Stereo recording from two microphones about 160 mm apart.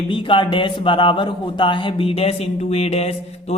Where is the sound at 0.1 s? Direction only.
30° left (ahead or behind).